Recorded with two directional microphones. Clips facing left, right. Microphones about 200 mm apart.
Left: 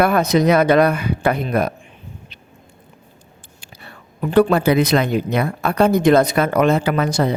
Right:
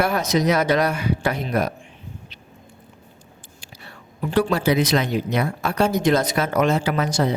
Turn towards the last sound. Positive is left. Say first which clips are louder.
# left 3 dB
turn(degrees=55)  # may be behind; listen again after turning